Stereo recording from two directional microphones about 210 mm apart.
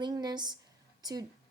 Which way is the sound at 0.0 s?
20° right (ahead or behind).